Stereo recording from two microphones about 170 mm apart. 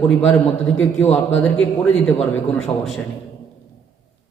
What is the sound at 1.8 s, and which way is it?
A man's voice, 5° left (ahead or behind).